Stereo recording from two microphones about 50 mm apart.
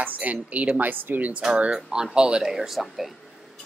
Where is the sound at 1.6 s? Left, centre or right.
Centre.